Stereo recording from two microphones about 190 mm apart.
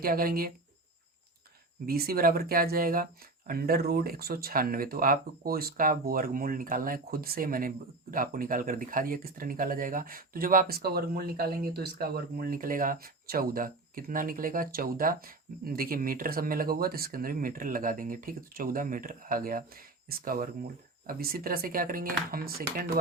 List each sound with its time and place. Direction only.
0.0 s speech: 50° right (ahead or behind)
1.9 s speech: 50° right (ahead or behind)